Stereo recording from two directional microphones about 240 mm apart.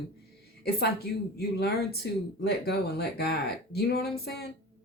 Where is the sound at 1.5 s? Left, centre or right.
Left.